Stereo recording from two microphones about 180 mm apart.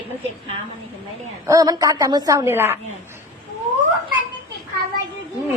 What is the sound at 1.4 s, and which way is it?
A woman's voice, 20° right (ahead or behind).